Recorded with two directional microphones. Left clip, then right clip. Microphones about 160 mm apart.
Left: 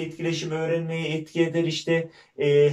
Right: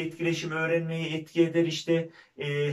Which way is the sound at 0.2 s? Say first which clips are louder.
Left 1 dB; 30° left (ahead or behind).